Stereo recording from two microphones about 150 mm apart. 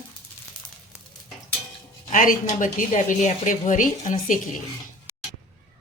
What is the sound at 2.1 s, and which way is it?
Speech, 60° left (ahead or behind).